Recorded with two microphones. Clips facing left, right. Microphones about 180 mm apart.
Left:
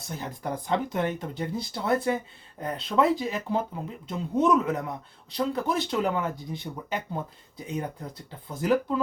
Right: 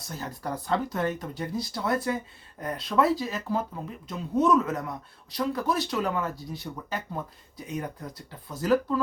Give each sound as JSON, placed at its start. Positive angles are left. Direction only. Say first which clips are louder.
{"t": 0.1, "sound": "speech", "louder": "left 1 dB", "side_deg": 20}